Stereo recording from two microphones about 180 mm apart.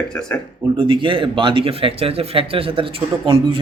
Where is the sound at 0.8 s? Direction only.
30° right (ahead or behind).